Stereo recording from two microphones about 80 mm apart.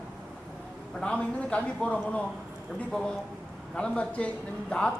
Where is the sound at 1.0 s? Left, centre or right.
Centre.